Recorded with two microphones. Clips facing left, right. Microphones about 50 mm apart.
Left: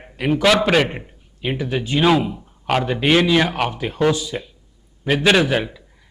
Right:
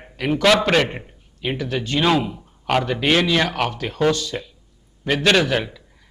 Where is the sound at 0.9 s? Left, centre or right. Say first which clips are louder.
Left 1 dB; centre.